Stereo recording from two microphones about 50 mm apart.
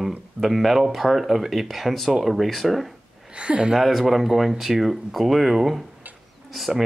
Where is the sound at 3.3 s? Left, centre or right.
Right.